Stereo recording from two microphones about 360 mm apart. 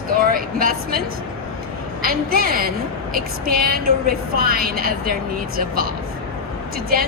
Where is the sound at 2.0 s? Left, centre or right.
Right.